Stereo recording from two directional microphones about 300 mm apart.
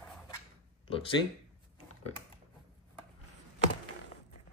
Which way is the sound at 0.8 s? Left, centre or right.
Centre.